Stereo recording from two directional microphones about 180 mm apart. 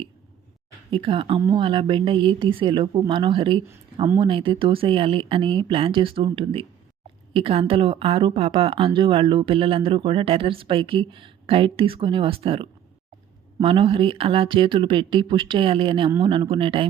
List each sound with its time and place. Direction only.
0.9 s a woman's voice: 30° right (ahead or behind)